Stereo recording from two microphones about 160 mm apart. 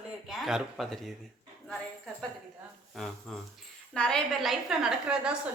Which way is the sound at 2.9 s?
5° left (ahead or behind).